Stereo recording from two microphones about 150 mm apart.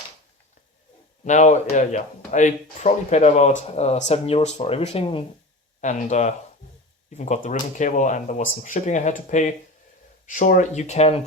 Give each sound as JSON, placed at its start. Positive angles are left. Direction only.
{"t": 1.2, "sound": "speech", "side_deg": 55}
{"t": 5.8, "sound": "speech", "side_deg": 50}